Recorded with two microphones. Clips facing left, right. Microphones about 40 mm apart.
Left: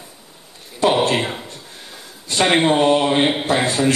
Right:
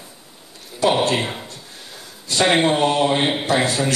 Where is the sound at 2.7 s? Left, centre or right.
Left.